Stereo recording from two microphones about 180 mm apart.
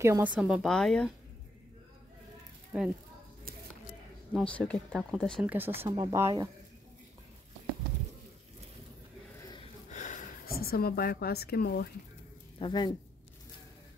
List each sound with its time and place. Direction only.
0.0 s speech: 10° right (ahead or behind)
2.7 s speech: 10° right (ahead or behind)
4.3 s speech: 5° left (ahead or behind); by 6.5 s 15° right (ahead or behind)
9.8 s a woman's voice: 40° left (ahead or behind); by 11.9 s 60° left (ahead or behind)
12.5 s speech: 25° left (ahead or behind)